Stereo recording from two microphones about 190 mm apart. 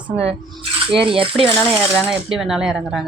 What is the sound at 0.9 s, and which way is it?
Stir, 30° right (ahead or behind).